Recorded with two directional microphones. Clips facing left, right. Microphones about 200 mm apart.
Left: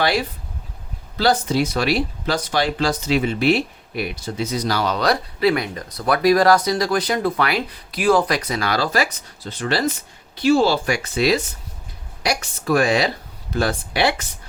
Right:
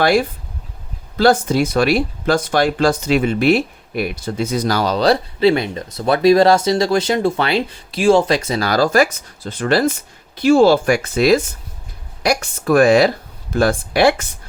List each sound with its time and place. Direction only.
0.0 s speech: 50° right (ahead or behind)